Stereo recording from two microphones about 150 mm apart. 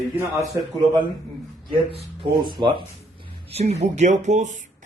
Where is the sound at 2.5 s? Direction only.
30° right (ahead or behind).